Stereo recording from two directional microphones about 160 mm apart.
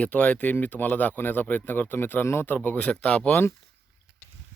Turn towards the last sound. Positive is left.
turn(degrees=15)  # may be behind; listen again after turning